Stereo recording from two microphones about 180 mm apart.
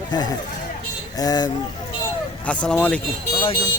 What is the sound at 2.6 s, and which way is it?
Speech, 5° left (ahead or behind).